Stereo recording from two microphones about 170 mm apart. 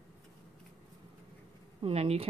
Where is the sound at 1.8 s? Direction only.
35° right (ahead or behind).